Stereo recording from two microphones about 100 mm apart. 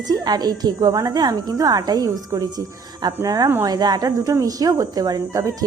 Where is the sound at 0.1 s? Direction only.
45° right (ahead or behind).